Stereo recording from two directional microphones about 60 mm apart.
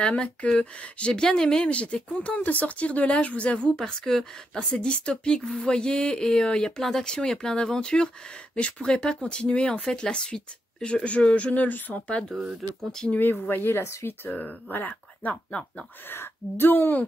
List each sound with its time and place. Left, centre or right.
0.0 s speech: centre
2.3 s speech: left
13.3 s speech: left
16.1 s speech: left